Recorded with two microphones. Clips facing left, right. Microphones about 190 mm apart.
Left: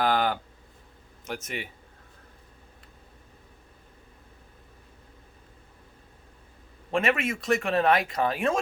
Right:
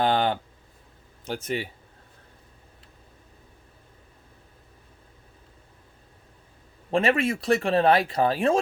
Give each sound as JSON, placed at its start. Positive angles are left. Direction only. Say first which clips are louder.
{"t": 0.0, "sound": "a sound", "louder": "right 2 dB", "side_deg": -30}
{"t": 1.2, "sound": "speech", "louder": "right 6 dB", "side_deg": -30}
{"t": 6.9, "sound": "speech", "louder": "right 3 dB", "side_deg": -30}